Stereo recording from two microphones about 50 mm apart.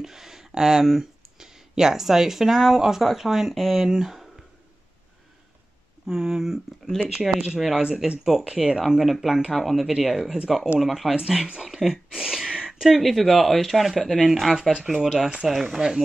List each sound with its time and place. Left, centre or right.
0.0 s speech: centre
6.0 s speech: centre
11.1 s speech: centre
11.7 s a sound: centre
13.1 s speech: centre
14.7 s speech: centre